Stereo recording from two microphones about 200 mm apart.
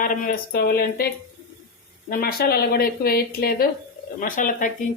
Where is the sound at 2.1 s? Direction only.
50° left (ahead or behind).